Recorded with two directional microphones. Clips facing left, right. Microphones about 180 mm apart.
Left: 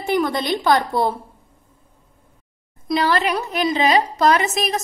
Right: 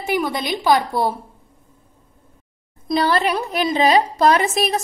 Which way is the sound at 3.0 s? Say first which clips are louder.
Right 1 dB; 35° right (ahead or behind).